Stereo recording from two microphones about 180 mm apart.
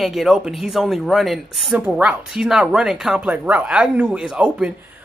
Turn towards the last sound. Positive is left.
turn(degrees=-5)  # may be behind; listen again after turning